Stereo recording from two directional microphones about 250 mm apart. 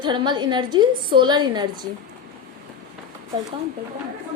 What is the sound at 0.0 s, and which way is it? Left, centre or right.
A woman's voice, centre.